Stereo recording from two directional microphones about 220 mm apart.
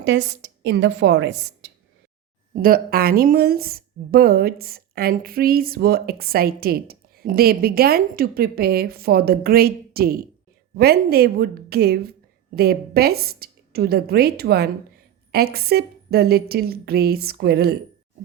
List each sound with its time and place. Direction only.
0.0 s a woman's voice: 55° right (ahead or behind)
2.6 s a woman's voice: 40° right (ahead or behind)